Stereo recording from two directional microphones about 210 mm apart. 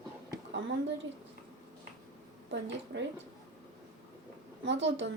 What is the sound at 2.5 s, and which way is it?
Speech, 55° right (ahead or behind).